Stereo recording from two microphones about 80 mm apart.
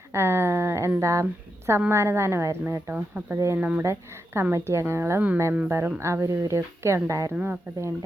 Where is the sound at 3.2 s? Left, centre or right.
Right.